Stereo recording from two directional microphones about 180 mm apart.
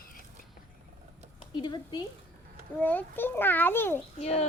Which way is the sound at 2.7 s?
10° left (ahead or behind).